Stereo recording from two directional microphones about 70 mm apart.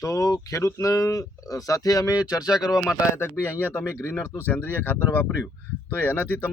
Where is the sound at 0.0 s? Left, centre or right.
Left.